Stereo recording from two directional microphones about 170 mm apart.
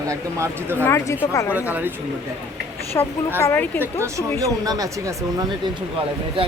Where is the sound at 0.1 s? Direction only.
15° right (ahead or behind).